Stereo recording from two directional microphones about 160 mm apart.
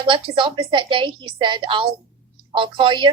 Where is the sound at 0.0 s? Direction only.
30° right (ahead or behind).